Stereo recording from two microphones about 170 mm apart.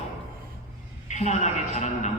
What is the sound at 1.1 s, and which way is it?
A man's voice, 45° left (ahead or behind).